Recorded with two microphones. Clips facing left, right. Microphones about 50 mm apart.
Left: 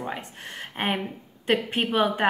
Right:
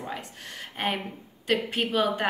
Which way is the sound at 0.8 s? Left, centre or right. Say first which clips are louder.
Left 2 dB; left.